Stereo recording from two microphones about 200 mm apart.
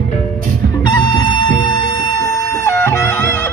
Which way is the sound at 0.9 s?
20° left (ahead or behind).